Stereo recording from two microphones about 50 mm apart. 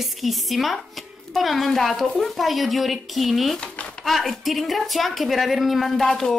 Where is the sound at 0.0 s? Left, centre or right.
Centre.